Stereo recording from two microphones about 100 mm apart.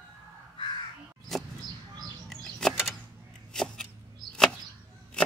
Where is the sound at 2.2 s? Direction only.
5° left (ahead or behind).